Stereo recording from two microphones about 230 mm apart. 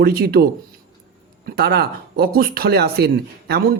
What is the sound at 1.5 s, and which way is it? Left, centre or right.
Speech, right.